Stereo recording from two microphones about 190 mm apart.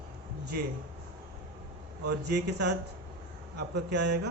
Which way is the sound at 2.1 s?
60° right (ahead or behind).